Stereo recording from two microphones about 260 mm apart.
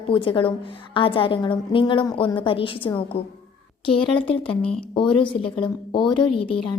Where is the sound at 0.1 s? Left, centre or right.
Centre.